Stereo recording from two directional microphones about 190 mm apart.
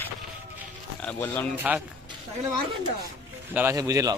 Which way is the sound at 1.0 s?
10° left (ahead or behind).